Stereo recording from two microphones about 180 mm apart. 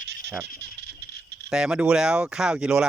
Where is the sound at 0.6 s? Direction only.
70° right (ahead or behind).